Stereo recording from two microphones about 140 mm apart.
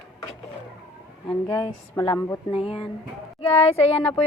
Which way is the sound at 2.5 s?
40° left (ahead or behind).